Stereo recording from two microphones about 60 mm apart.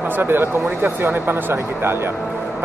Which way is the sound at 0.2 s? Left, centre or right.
Right.